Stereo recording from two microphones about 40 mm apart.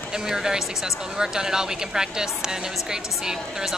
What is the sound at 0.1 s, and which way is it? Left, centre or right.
Speech, centre.